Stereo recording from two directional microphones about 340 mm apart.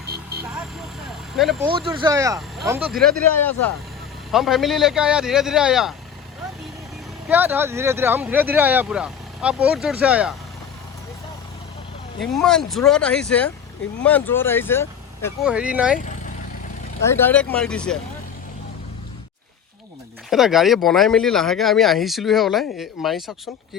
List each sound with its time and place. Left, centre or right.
0.0 s vehicle: right
1.6 s speech: centre
7.3 s speech: centre
12.2 s speech: centre
15.4 s speech: centre
17.0 s speech: centre
20.3 s speech: centre